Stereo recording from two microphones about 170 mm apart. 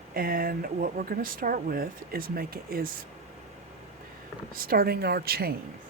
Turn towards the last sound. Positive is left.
turn(degrees=-65)  # may be behind; listen again after turning